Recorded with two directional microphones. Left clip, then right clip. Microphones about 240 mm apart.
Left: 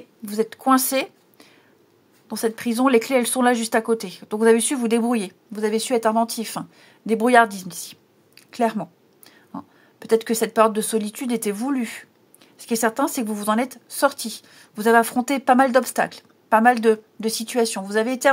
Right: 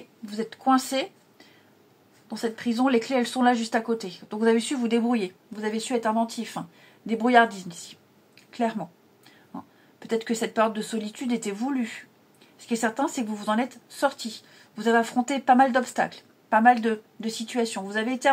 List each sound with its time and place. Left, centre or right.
0.2 s speech: left